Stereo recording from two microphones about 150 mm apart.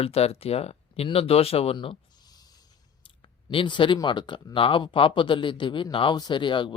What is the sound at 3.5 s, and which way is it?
Speech, 35° left (ahead or behind).